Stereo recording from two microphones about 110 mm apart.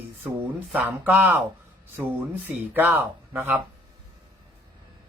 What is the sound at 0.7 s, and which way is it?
Speech, 15° right (ahead or behind).